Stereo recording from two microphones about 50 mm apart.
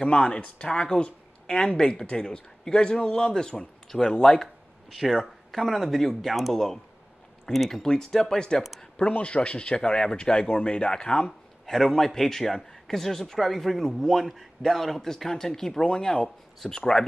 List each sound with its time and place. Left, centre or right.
0.0 s a man's voice: left
4.9 s a man's voice: centre
9.1 s speech: left
11.6 s a sound: centre
11.9 s a man's voice: centre